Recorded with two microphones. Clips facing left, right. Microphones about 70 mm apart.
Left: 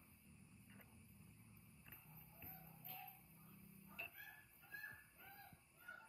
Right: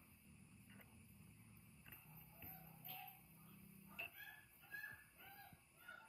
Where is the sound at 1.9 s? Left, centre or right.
Centre.